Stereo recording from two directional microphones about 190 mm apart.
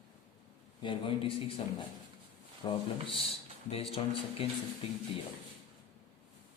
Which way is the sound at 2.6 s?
30° left (ahead or behind).